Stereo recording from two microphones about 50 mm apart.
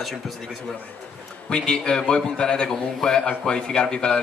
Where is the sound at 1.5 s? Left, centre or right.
Centre.